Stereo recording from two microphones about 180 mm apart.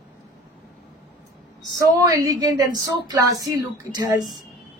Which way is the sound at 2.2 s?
20° right (ahead or behind).